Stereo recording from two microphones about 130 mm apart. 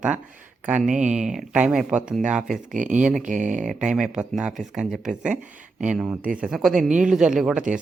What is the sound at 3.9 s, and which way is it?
A man's voice, 5° right (ahead or behind).